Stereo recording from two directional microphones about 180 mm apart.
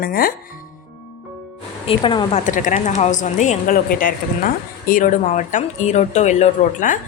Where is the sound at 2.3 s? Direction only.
45° left (ahead or behind).